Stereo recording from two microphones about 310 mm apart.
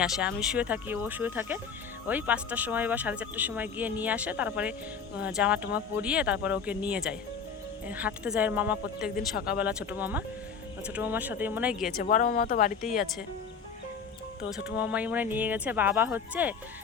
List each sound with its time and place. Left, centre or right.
0.0 s speech: centre
11.9 s speech: left
14.5 s speech: centre